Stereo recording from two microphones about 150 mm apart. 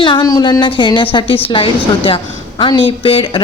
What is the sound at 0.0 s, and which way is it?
A woman's voice, 30° left (ahead or behind).